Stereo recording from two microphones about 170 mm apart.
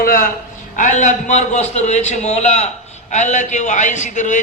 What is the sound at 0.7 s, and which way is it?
A man's voice, 45° left (ahead or behind).